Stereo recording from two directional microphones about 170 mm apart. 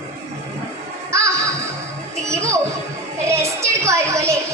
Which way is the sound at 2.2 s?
15° right (ahead or behind).